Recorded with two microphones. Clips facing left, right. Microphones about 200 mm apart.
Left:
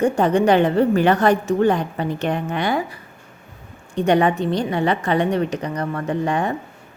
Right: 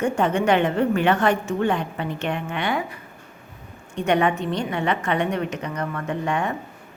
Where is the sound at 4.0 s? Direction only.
35° left (ahead or behind).